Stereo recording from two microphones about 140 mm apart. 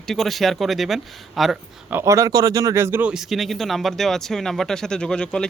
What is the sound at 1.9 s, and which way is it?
Speech, 20° right (ahead or behind).